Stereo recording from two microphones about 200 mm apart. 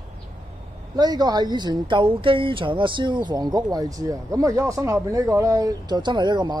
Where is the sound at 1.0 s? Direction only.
20° right (ahead or behind).